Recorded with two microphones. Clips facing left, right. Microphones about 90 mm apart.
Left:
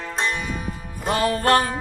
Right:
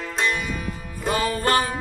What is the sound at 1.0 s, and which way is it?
Music, 60° left (ahead or behind).